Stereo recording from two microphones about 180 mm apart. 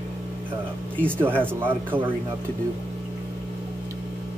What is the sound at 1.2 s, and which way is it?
Speech, 10° right (ahead or behind).